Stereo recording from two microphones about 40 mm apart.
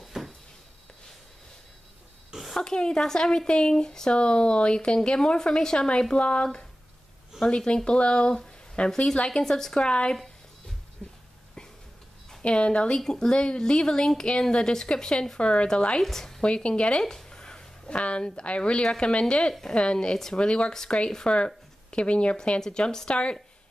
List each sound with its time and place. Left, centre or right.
0.2 s a sound: centre
2.6 s speech: centre
4.1 s speech: left
9.8 s speech: left
11.0 s a sound: left
12.4 s speech: left
16.0 s speech: centre
16.4 s speech: left
17.0 s a sound: centre; by 18.6 s left
18.6 s speech: centre
22.7 s speech: centre